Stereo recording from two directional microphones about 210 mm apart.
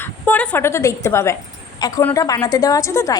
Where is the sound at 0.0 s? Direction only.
10° left (ahead or behind).